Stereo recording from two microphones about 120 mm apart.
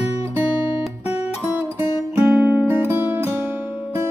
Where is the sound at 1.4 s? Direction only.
20° right (ahead or behind).